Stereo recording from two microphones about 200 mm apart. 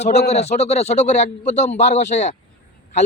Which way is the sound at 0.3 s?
35° left (ahead or behind).